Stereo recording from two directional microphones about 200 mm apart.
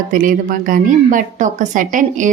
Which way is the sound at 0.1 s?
40° right (ahead or behind).